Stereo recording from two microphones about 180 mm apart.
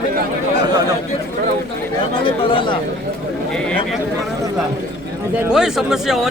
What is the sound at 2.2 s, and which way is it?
Speech, 30° left (ahead or behind).